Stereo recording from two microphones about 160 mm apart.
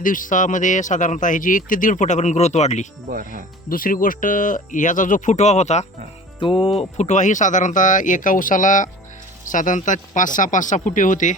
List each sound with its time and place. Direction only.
0.0 s a man's voice: 55° left (ahead or behind)
3.1 s speech: 60° right (ahead or behind)
3.7 s speech: 60° left (ahead or behind); by 5.8 s 45° left (ahead or behind)
6.4 s speech: 30° left (ahead or behind)
6.7 s a man's voice: 45° left (ahead or behind)